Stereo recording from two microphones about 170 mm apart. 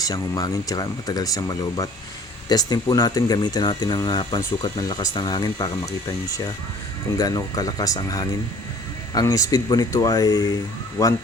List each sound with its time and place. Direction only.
0.0 s speech: 20° left (ahead or behind)